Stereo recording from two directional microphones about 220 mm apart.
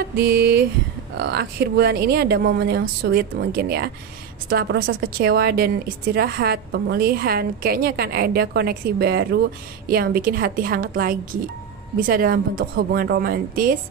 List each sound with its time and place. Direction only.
0.2 s a woman's voice: 45° right (ahead or behind)